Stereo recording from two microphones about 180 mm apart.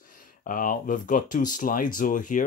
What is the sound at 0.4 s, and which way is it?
Speech, 50° left (ahead or behind).